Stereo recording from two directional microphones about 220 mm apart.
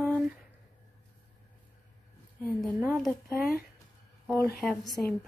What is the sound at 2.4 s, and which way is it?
A woman's voice, 5° left (ahead or behind).